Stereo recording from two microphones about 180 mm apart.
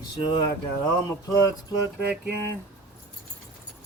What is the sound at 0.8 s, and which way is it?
Speech, 20° left (ahead or behind).